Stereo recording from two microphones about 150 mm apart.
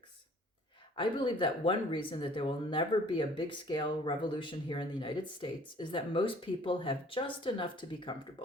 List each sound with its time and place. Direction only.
0.9 s speech: 35° left (ahead or behind)